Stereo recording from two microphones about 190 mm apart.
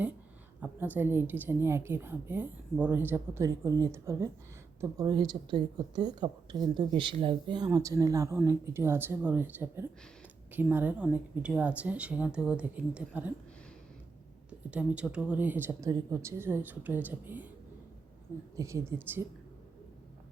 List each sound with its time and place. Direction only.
0.6 s a woman's voice: 10° right (ahead or behind)
14.7 s a woman's voice: 5° right (ahead or behind)
18.5 s a woman's voice: 15° right (ahead or behind)